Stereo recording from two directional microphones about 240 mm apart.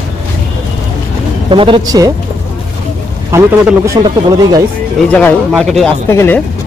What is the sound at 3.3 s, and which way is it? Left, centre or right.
Speech, centre.